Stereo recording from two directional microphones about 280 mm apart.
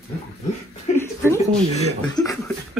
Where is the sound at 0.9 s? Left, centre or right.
Centre.